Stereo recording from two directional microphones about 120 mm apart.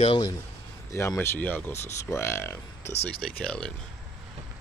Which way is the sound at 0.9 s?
20° left (ahead or behind).